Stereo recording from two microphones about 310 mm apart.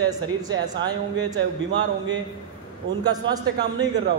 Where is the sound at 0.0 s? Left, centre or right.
Centre.